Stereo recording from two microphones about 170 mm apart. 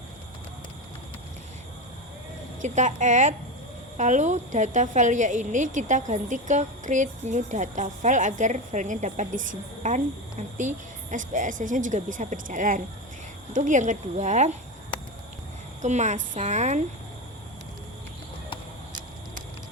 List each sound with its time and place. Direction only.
2.6 s a woman's voice: 45° right (ahead or behind)
15.8 s a woman's voice: 45° right (ahead or behind)